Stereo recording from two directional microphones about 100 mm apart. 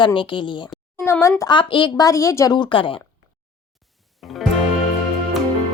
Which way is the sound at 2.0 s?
30° left (ahead or behind).